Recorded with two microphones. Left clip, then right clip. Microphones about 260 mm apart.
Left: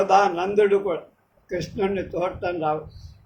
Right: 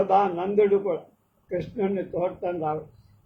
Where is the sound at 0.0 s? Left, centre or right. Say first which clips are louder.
Left 3 dB; left.